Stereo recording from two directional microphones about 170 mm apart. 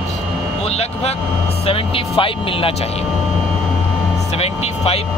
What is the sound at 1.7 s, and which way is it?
Speech, 30° left (ahead or behind).